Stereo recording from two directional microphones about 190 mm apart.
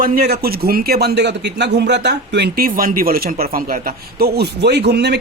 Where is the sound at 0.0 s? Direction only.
55° right (ahead or behind).